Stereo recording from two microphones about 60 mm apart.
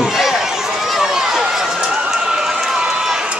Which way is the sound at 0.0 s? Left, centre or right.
Centre.